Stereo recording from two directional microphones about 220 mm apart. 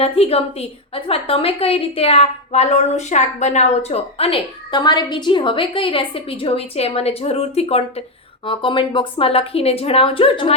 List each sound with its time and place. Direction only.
0.0 s a woman's voice: 25° left (ahead or behind)